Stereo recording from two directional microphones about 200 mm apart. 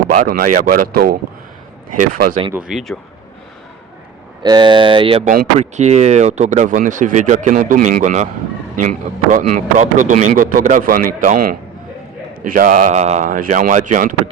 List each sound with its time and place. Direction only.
0.2 s speech: 45° right (ahead or behind)
2.5 s speech: 5° right (ahead or behind)
4.4 s speech: 20° right (ahead or behind); by 11.3 s 40° right (ahead or behind)
12.4 s speech: 40° right (ahead or behind)